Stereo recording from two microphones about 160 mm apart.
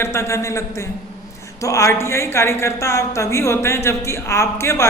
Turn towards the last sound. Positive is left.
turn(degrees=15)  # may be behind; listen again after turning